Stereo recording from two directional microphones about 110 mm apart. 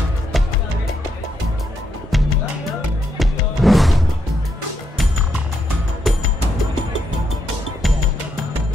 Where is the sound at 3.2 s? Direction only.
Centre (ahead or behind).